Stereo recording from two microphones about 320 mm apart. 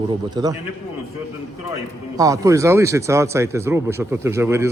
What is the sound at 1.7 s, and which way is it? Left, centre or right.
Speech, centre.